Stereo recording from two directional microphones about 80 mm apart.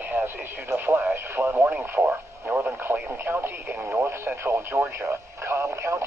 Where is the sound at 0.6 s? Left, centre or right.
Right.